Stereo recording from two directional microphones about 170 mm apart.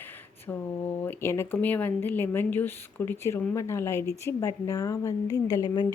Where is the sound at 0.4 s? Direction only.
10° left (ahead or behind).